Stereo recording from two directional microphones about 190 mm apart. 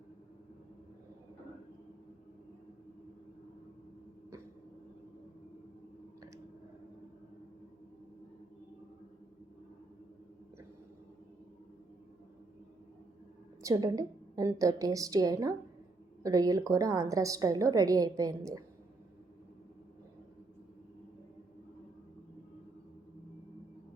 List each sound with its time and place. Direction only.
13.6 s a woman's voice: 15° right (ahead or behind)